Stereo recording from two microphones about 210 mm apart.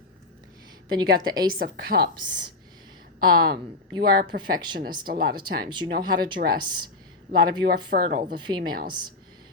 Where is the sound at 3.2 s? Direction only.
45° right (ahead or behind).